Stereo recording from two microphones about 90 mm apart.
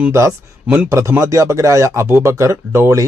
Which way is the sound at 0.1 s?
35° right (ahead or behind).